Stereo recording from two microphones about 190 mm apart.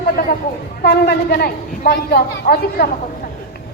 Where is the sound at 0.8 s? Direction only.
55° left (ahead or behind).